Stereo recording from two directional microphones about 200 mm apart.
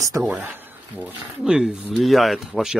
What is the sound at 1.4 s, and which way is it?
Speech, 5° right (ahead or behind).